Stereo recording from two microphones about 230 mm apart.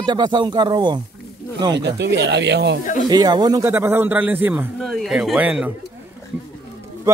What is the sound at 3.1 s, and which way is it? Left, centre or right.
A man's voice, centre.